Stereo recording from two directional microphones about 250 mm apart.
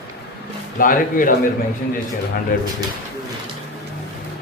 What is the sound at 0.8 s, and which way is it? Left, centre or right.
Speech, left.